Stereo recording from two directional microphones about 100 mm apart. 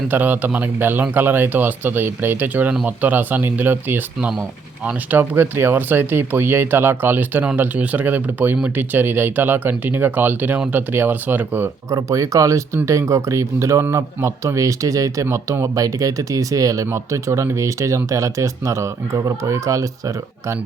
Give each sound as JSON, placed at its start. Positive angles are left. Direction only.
{"t": 0.1, "sound": "speech", "side_deg": -15}
{"t": 11.9, "sound": "speech", "side_deg": -35}